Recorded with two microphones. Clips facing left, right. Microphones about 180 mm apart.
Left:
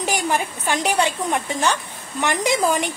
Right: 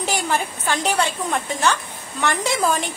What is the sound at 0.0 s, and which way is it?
A woman's voice, 15° left (ahead or behind).